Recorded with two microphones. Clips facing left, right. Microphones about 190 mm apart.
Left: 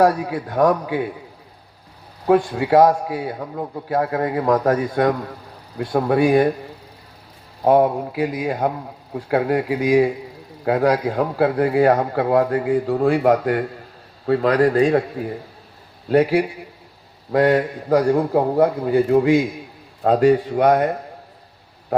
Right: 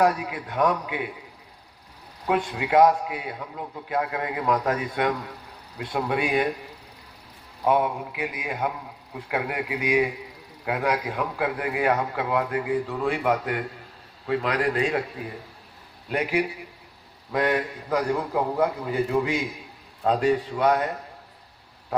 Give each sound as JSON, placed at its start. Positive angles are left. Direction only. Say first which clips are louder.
{"t": 0.0, "sound": "a man's voice", "louder": "left 6 dB", "side_deg": 35}
{"t": 2.2, "sound": "a man's voice", "louder": "left 8 dB", "side_deg": 35}